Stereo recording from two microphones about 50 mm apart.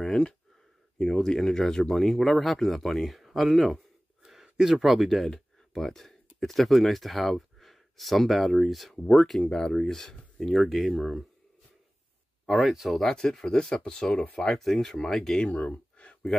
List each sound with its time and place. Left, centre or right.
0.9 s speech: centre
5.3 s speech: centre
9.0 s speech: centre
12.4 s speech: centre
12.8 s speech: centre
13.1 s speech: centre
15.4 s gasp: left